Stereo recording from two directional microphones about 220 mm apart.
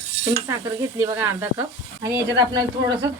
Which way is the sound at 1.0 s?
10° right (ahead or behind).